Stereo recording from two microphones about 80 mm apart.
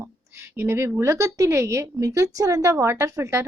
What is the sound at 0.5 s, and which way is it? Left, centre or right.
A woman's voice, right.